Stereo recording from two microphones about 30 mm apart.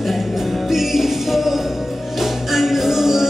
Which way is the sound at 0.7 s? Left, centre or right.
Centre.